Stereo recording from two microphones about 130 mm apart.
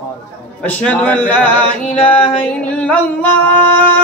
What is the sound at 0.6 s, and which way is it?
Male singing, 10° left (ahead or behind).